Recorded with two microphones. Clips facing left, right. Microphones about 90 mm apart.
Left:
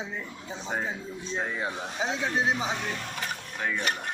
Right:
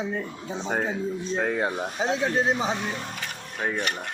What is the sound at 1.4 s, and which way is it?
Speech, 60° right (ahead or behind).